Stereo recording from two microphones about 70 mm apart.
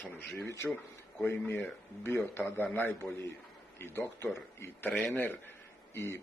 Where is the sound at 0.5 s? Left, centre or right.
Left.